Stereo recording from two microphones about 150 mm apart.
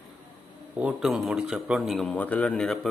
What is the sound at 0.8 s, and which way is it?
Speech, 5° right (ahead or behind).